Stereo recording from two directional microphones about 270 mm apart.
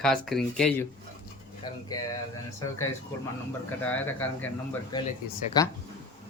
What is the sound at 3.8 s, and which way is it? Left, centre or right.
Speech, centre.